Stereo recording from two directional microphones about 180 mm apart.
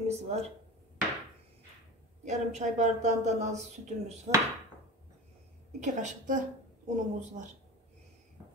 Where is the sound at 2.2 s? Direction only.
40° right (ahead or behind).